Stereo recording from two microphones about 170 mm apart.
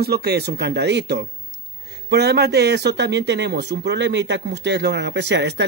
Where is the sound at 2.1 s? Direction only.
75° right (ahead or behind).